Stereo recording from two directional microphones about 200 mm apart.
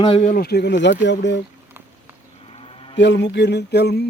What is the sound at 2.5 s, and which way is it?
Livestock, 30° left (ahead or behind).